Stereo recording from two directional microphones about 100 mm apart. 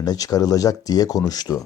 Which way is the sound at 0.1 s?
35° left (ahead or behind).